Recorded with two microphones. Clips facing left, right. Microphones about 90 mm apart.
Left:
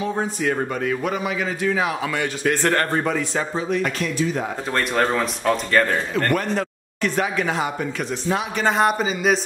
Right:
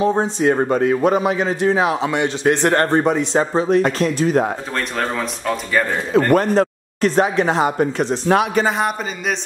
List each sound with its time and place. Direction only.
0.0 s a man's voice: 30° right (ahead or behind)
3.5 s speech: 35° right (ahead or behind)
4.7 s speech: centre (ahead or behind)
6.3 s speech: 40° right (ahead or behind)
8.6 s speech: centre (ahead or behind)